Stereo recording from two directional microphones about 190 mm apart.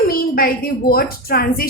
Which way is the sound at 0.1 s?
50° left (ahead or behind).